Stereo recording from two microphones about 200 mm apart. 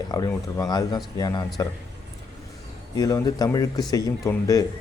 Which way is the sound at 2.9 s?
20° left (ahead or behind).